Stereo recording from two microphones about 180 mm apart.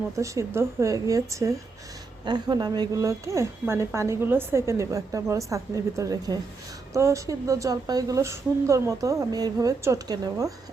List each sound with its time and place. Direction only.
0.2 s a woman's voice: 15° right (ahead or behind)